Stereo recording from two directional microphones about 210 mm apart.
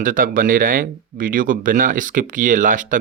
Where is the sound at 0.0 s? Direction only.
40° right (ahead or behind).